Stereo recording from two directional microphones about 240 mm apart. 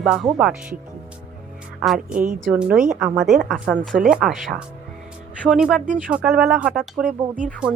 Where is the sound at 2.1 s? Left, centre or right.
Right.